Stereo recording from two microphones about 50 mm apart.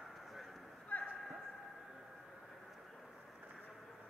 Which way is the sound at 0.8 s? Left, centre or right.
Left.